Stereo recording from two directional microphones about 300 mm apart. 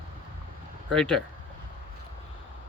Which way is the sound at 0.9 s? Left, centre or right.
Centre.